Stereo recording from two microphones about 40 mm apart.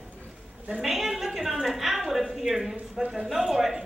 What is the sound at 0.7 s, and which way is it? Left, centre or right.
A woman's voice, centre.